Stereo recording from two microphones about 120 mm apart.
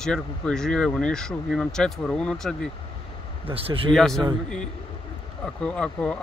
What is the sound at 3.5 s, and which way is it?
Speech, 50° right (ahead or behind).